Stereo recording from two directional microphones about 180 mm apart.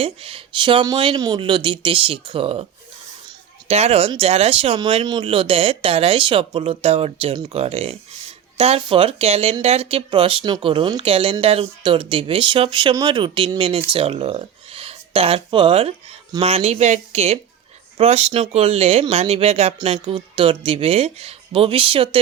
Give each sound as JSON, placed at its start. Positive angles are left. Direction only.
{"t": 0.0, "sound": "speech", "side_deg": -30}
{"t": 3.7, "sound": "speech", "side_deg": -35}